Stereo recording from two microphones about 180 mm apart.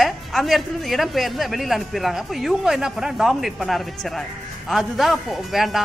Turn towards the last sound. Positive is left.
turn(degrees=0)  # may be behind; listen again after turning